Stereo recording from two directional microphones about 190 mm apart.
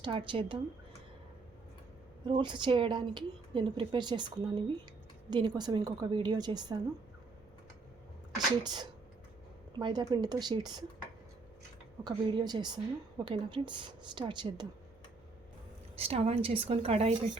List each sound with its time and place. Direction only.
0.0 s a woman's voice: 25° right (ahead or behind)
2.2 s a woman's voice: 25° right (ahead or behind)
8.6 s a woman's voice: 20° right (ahead or behind)
12.0 s a woman's voice: 25° right (ahead or behind)
16.0 s a woman's voice: 30° right (ahead or behind)